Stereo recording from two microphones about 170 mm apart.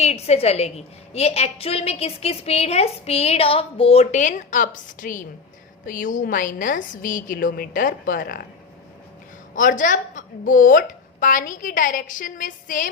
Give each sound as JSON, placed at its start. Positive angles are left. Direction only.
{"t": 0.0, "sound": "a woman's voice", "side_deg": 40}
{"t": 9.6, "sound": "a woman's voice", "side_deg": 50}